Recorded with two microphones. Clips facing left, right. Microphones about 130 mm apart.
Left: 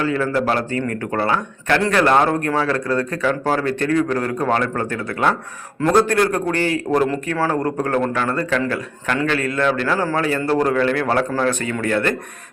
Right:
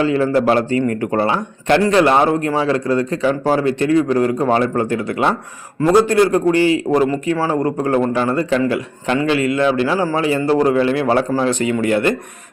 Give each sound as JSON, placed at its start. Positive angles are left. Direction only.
{"t": 0.0, "sound": "a man's voice", "side_deg": -25}